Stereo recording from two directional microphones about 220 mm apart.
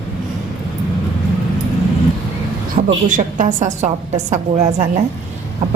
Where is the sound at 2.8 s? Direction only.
40° right (ahead or behind).